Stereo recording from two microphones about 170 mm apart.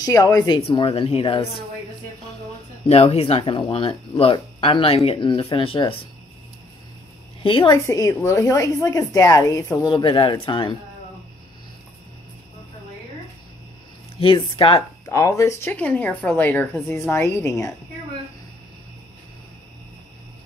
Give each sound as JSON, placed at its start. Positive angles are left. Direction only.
{"t": 0.0, "sound": "speech", "side_deg": 20}
{"t": 0.7, "sound": "speech", "side_deg": 35}
{"t": 2.9, "sound": "speech", "side_deg": 35}
{"t": 7.4, "sound": "speech", "side_deg": 30}
{"t": 7.7, "sound": "speech", "side_deg": 20}
{"t": 14.2, "sound": "speech", "side_deg": 30}
{"t": 15.0, "sound": "speech", "side_deg": 20}